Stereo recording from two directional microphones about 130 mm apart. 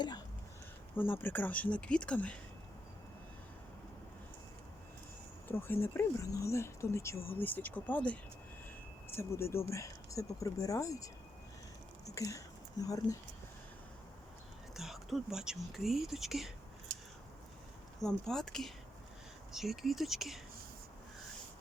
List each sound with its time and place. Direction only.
0.9 s speech: 15° left (ahead or behind)
5.5 s speech: 15° left (ahead or behind)
14.8 s speech: centre (ahead or behind)
18.0 s speech: 5° left (ahead or behind)